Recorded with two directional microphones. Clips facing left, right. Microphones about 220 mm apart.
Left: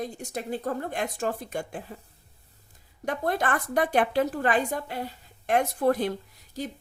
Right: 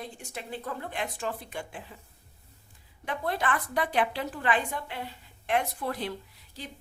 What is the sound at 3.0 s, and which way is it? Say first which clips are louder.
Speech: left 3 dB; 45° left (ahead or behind).